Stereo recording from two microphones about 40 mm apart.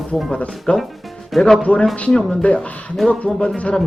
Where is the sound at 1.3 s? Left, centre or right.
Centre.